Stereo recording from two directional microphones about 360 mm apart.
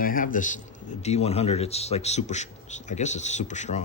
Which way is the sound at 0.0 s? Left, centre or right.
Left.